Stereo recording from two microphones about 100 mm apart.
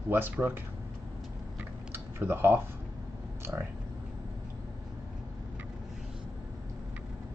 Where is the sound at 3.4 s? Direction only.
25° right (ahead or behind).